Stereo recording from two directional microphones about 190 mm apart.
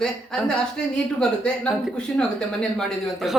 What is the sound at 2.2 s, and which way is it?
A woman's voice, 5° left (ahead or behind).